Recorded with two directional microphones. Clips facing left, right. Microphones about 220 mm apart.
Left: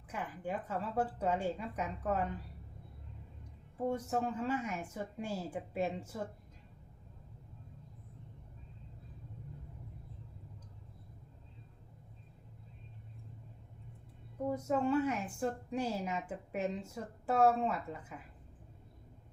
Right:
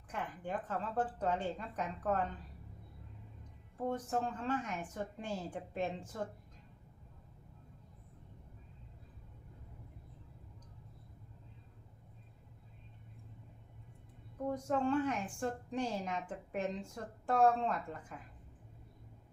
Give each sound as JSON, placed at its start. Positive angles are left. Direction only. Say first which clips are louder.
{"t": 0.1, "sound": "a woman's voice", "louder": "left 1 dB", "side_deg": 10}
{"t": 3.8, "sound": "a woman's voice", "louder": "left 2 dB", "side_deg": 10}
{"t": 14.4, "sound": "a woman's voice", "louder": "left 1 dB", "side_deg": 5}